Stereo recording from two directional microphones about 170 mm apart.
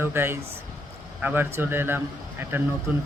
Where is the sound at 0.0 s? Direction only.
15° right (ahead or behind).